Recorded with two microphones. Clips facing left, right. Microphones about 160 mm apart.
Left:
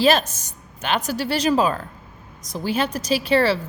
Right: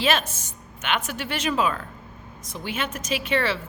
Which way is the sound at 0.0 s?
35° left (ahead or behind).